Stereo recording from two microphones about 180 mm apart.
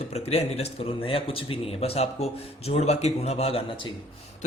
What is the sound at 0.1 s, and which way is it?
Speech, 35° left (ahead or behind).